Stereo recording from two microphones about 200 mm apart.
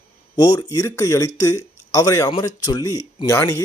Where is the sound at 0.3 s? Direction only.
20° left (ahead or behind).